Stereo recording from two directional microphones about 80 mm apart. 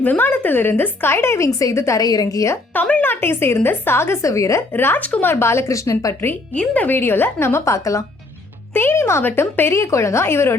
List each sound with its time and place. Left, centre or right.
0.0 s a woman's voice: left
2.0 s a woman's voice: left
2.7 s a woman's voice: left
4.7 s a woman's voice: left
5.3 s a woman's voice: left
6.5 s a woman's voice: centre; by 10.6 s left